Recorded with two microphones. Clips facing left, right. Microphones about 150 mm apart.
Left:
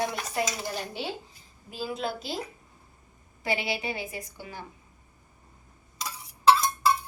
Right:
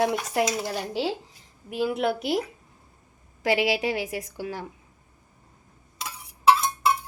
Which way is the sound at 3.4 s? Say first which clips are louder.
Right 7 dB; 90° right.